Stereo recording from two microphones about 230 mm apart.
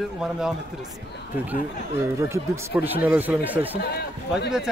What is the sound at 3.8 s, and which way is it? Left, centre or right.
Speech, left.